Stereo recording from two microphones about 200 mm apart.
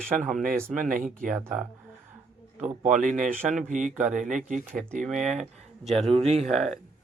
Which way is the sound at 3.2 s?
Centre (ahead or behind).